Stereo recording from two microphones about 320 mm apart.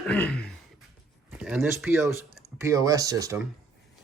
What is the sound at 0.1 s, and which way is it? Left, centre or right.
Throat clearing, centre.